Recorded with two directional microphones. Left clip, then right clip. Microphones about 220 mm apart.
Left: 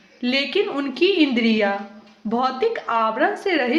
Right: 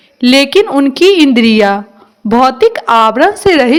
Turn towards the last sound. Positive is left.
turn(degrees=-45)  # may be behind; listen again after turning